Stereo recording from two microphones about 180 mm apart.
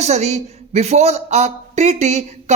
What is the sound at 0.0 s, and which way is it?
Speech, 40° right (ahead or behind).